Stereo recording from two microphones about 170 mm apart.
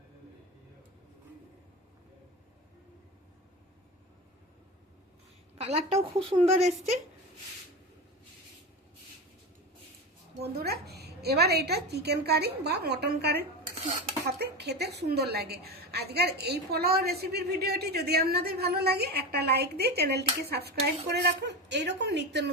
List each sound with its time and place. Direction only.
5.5 s a woman's voice: 40° right (ahead or behind)
10.4 s a woman's voice: 70° right (ahead or behind); by 22.4 s 90° right